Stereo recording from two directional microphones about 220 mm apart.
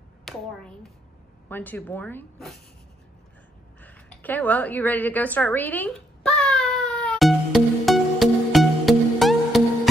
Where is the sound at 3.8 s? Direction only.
10° left (ahead or behind).